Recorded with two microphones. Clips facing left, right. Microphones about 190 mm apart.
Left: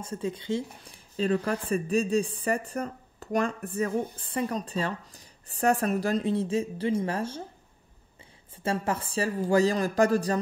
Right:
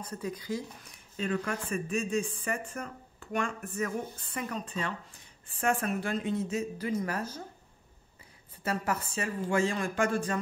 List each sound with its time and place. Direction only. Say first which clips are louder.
0.0 s speech: left 4 dB; 25° left (ahead or behind)
8.6 s speech: left 3 dB; 30° left (ahead or behind)